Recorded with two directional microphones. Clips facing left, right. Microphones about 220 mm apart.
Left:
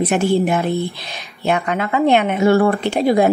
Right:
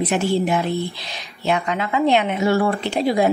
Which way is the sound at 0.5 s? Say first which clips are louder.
Left 3 dB; 50° left (ahead or behind).